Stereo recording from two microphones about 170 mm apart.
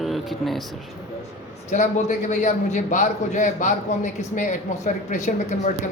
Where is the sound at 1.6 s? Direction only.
45° left (ahead or behind).